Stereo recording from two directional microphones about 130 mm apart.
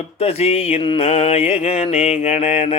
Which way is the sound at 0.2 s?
50° left (ahead or behind).